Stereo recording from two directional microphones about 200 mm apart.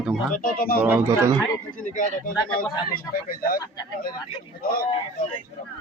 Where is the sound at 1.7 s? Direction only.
40° left (ahead or behind).